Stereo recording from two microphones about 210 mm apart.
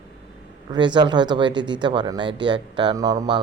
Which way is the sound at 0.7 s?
20° right (ahead or behind).